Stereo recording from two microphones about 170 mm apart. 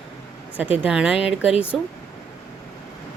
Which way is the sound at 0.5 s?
10° right (ahead or behind).